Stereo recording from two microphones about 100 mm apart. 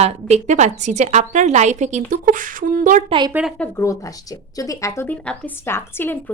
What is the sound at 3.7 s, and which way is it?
Speech, 30° left (ahead or behind).